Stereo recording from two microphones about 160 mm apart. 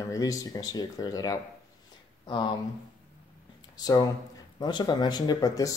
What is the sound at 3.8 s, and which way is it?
Speech, 25° left (ahead or behind).